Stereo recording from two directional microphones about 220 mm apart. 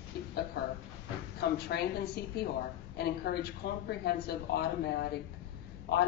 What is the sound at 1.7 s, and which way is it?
Speech, 45° left (ahead or behind).